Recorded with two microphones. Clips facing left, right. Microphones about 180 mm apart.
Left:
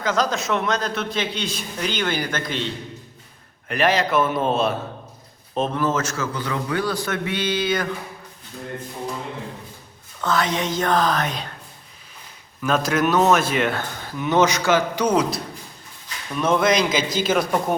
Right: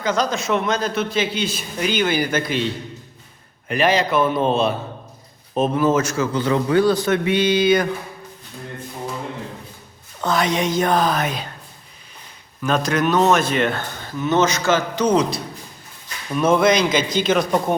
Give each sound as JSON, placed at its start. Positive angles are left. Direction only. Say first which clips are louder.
{"t": 0.0, "sound": "a man's voice", "louder": "right 1 dB", "side_deg": 0}
{"t": 3.7, "sound": "a man's voice", "louder": "right 2 dB", "side_deg": 0}
{"t": 5.5, "sound": "speech", "louder": "right 5 dB", "side_deg": -10}
{"t": 6.3, "sound": "a man's voice", "louder": "right 10 dB", "side_deg": -25}
{"t": 10.2, "sound": "speech", "louder": "right 2 dB", "side_deg": -15}
{"t": 12.6, "sound": "a man's voice", "louder": "right 1 dB", "side_deg": 5}